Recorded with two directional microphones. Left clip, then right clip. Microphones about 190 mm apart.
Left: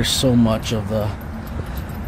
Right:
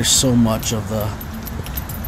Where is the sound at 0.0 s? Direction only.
10° left (ahead or behind).